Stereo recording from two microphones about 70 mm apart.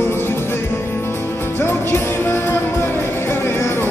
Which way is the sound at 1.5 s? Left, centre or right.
Left.